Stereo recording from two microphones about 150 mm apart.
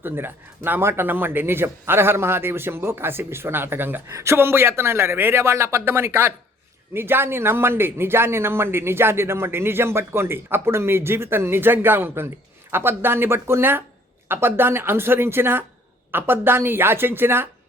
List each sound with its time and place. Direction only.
0.0 s speech: 15° right (ahead or behind)